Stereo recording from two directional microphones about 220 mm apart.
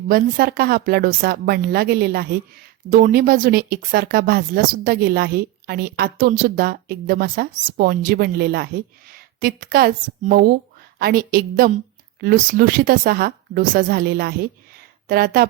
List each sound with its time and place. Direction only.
0.1 s a woman's voice: 40° right (ahead or behind)